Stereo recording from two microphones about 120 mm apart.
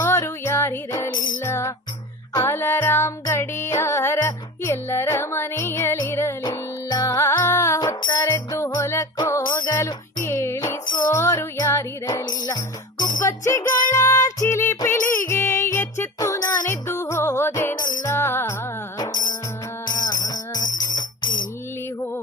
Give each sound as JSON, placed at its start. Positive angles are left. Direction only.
{"t": 0.0, "sound": "music", "side_deg": 20}
{"t": 6.4, "sound": "music", "side_deg": 35}
{"t": 7.8, "sound": "music", "side_deg": 35}
{"t": 8.3, "sound": "music", "side_deg": 25}
{"t": 10.2, "sound": "music", "side_deg": 20}
{"t": 12.0, "sound": "music", "side_deg": 35}
{"t": 13.2, "sound": "music", "side_deg": 25}
{"t": 18.9, "sound": "music", "side_deg": 35}